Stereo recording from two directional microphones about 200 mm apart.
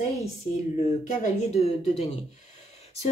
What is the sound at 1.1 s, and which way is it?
Speech, 35° left (ahead or behind).